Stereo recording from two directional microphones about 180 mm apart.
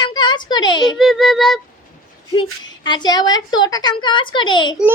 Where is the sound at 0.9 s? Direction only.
Centre (ahead or behind).